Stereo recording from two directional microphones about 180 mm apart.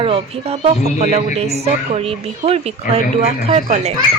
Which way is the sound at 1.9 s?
35° right (ahead or behind).